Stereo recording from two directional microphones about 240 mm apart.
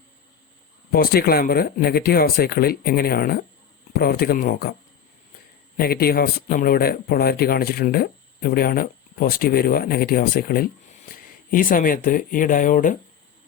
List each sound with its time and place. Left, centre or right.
0.9 s speech: left
5.7 s speech: left